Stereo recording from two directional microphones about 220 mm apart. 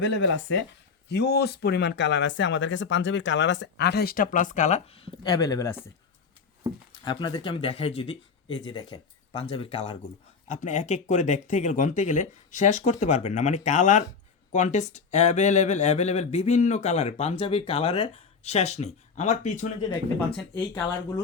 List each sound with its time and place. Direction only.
0.0 s speech: 55° left (ahead or behind); by 5.8 s 15° left (ahead or behind)
7.0 s speech: 20° left (ahead or behind)